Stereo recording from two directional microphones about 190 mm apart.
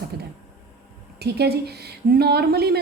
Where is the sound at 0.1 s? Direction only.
60° right (ahead or behind).